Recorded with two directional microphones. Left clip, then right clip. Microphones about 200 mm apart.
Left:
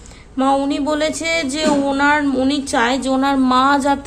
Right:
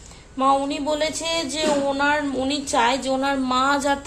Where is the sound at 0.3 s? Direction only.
15° left (ahead or behind).